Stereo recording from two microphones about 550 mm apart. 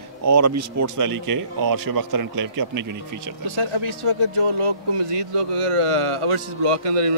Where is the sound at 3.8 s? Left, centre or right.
Right.